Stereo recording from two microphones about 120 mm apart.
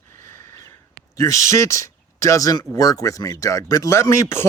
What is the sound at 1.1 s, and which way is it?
Speech, 25° left (ahead or behind).